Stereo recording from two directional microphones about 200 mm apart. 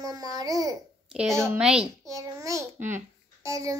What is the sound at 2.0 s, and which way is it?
A child's voice, 15° right (ahead or behind).